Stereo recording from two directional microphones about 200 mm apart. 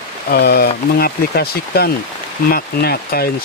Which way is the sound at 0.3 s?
55° left (ahead or behind).